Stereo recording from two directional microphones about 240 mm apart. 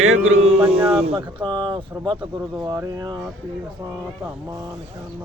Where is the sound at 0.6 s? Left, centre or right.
Centre.